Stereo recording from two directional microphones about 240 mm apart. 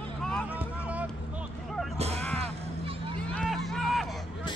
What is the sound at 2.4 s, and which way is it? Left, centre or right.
Music, right.